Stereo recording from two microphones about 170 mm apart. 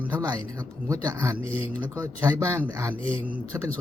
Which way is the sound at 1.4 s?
30° left (ahead or behind).